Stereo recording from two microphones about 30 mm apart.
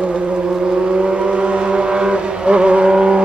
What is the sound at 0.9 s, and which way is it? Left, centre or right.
Vehicle, right.